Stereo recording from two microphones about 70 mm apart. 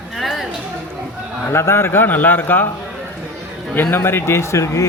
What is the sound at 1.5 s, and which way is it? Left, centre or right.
A man's voice, left.